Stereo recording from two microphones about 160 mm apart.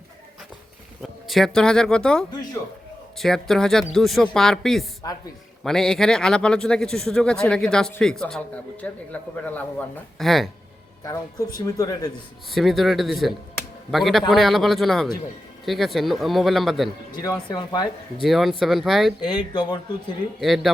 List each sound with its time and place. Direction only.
1.3 s speech: 5° left (ahead or behind)
11.0 s speech: 20° left (ahead or behind)
12.5 s speech: centre (ahead or behind)
17.2 s speech: 25° left (ahead or behind)
18.2 s speech: centre (ahead or behind)
19.3 s speech: 30° left (ahead or behind)
20.4 s speech: centre (ahead or behind)